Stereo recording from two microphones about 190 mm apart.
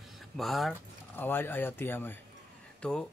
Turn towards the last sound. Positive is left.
turn(degrees=5)  # may be behind; listen again after turning